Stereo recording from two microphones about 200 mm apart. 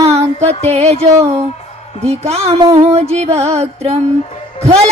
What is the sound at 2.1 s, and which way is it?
Music, 30° right (ahead or behind).